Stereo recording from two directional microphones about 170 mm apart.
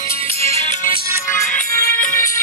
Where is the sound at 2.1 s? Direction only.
20° left (ahead or behind).